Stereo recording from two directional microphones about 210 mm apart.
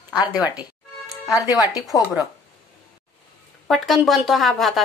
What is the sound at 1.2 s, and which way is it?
Speech, 15° left (ahead or behind).